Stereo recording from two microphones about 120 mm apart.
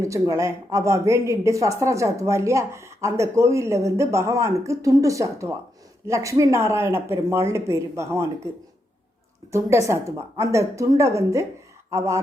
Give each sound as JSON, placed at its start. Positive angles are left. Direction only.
{"t": 0.0, "sound": "speech", "side_deg": -25}
{"t": 9.5, "sound": "speech", "side_deg": -25}